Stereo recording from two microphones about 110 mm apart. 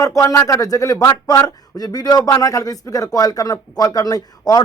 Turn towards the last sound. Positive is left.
turn(degrees=35)  # may be behind; listen again after turning